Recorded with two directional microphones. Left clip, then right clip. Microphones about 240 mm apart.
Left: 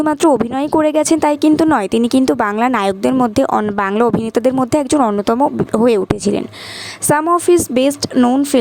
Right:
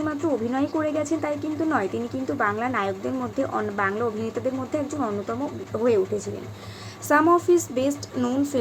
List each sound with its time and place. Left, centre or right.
0.0 s speech: left
7.1 s a woman's voice: left